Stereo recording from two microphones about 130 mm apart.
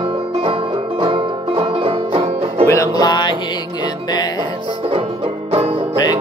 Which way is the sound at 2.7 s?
25° left (ahead or behind).